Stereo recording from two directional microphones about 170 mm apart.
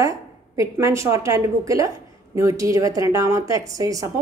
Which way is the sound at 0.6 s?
15° right (ahead or behind).